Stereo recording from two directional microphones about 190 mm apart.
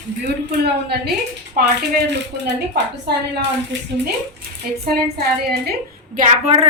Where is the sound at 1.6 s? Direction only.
50° right (ahead or behind).